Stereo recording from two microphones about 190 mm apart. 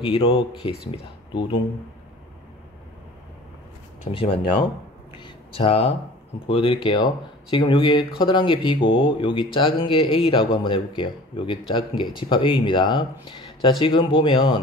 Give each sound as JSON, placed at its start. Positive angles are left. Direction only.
{"t": 0.0, "sound": "speech", "side_deg": 30}
{"t": 4.1, "sound": "speech", "side_deg": 30}
{"t": 5.2, "sound": "a sound", "side_deg": 25}
{"t": 6.4, "sound": "speech", "side_deg": 30}